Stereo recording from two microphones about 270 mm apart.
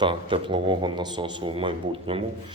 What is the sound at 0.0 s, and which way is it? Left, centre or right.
Speech, centre.